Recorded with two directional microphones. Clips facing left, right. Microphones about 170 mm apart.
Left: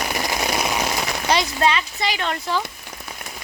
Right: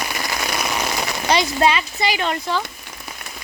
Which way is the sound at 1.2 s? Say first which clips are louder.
Right 2 dB; centre (ahead or behind).